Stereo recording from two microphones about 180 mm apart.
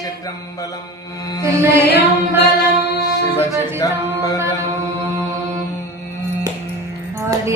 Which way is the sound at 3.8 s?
20° left (ahead or behind).